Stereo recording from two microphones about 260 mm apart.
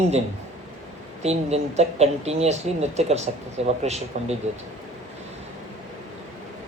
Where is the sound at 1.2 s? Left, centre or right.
Right.